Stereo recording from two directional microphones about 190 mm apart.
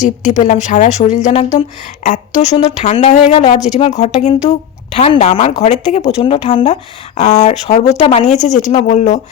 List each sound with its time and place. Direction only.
0.0 s speech: 40° left (ahead or behind)